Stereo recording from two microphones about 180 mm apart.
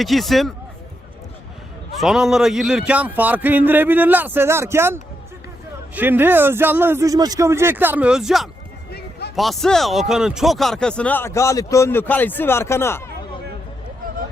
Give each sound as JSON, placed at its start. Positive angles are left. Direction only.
{"t": 0.0, "sound": "a man's voice", "side_deg": 0}
{"t": 2.0, "sound": "speech", "side_deg": 0}
{"t": 8.9, "sound": "a sound", "side_deg": 60}
{"t": 9.3, "sound": "speech", "side_deg": 0}